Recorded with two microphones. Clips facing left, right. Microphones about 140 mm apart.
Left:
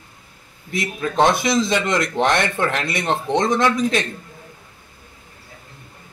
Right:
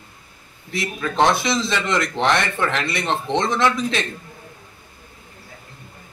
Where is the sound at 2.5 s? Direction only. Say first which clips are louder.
Left 1 dB; 15° left (ahead or behind).